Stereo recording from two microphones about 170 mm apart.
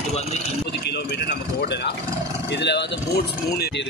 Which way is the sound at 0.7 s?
80° left.